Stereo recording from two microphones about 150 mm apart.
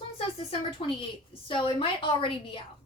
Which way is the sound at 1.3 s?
35° left (ahead or behind).